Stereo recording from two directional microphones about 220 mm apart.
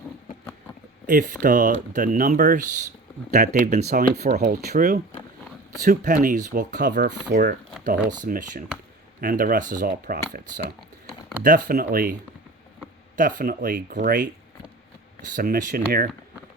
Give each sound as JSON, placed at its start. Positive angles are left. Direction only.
{"t": 1.0, "sound": "speech", "side_deg": -40}
{"t": 4.4, "sound": "speech", "side_deg": -45}
{"t": 11.4, "sound": "speech", "side_deg": -40}
{"t": 13.1, "sound": "speech", "side_deg": -40}
{"t": 15.4, "sound": "speech", "side_deg": -35}